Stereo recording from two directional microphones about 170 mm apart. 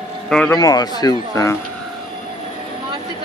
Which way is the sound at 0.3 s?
5° left (ahead or behind).